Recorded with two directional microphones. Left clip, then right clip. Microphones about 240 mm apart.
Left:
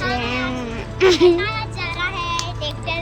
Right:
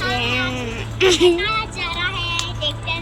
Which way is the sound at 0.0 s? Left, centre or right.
Centre.